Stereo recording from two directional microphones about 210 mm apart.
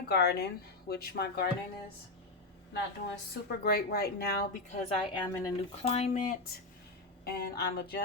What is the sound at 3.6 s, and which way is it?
Speech, 45° left (ahead or behind).